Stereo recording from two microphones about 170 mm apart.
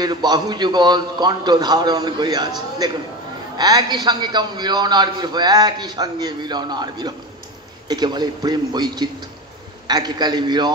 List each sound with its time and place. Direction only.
0.0 s a man's voice: 25° right (ahead or behind)